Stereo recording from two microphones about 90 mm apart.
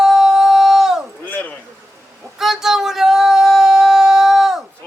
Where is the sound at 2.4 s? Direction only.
5° right (ahead or behind).